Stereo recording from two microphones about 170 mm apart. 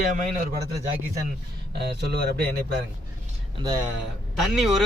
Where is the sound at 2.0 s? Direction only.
75° right (ahead or behind).